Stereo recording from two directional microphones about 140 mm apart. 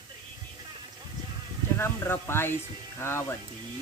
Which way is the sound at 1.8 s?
15° left (ahead or behind).